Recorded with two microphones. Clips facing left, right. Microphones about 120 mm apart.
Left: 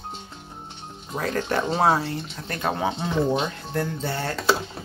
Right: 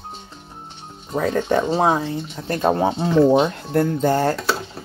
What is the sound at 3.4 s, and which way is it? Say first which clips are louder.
Speech: right 8 dB; 45° right (ahead or behind).